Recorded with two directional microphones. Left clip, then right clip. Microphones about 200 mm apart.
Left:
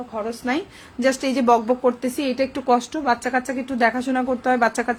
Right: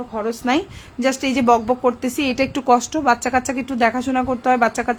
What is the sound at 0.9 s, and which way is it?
A woman's voice, 10° right (ahead or behind).